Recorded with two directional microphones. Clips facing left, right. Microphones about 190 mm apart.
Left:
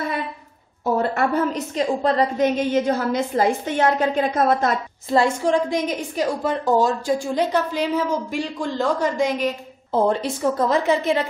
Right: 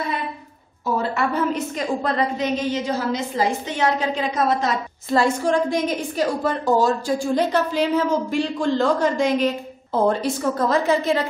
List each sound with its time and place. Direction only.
0.9 s a sound: 50° left (ahead or behind)
1.8 s a woman's voice: 30° left (ahead or behind)
2.3 s a woman's voice: 55° left (ahead or behind)
5.1 s a woman's voice: 20° left (ahead or behind)